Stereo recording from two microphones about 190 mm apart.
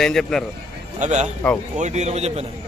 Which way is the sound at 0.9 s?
40° right (ahead or behind).